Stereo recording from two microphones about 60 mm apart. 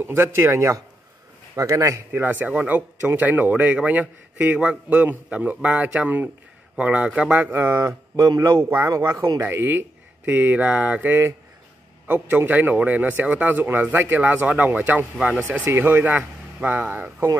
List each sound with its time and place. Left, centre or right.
0.0 s speech: right
2.1 s a man's voice: right
6.8 s a man's voice: centre
7.3 s speech: right
7.7 s speech: right
8.5 s speech: right
8.8 s speech: right
9.7 s speech: right
11.1 s speech: right
12.1 s a man's voice: right